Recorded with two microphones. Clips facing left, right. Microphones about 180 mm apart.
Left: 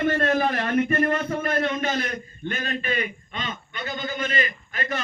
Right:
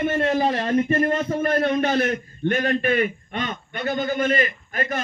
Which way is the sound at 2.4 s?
55° right (ahead or behind).